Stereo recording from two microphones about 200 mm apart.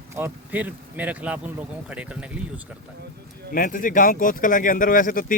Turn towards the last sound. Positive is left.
turn(degrees=45)  # may be behind; listen again after turning